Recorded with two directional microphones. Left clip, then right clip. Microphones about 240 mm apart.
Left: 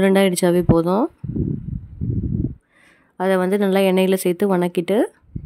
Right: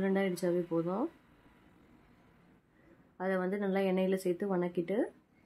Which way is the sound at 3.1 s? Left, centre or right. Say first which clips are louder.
Left 16 dB; left.